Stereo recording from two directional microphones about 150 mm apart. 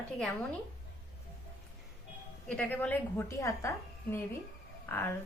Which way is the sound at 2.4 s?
5° left (ahead or behind).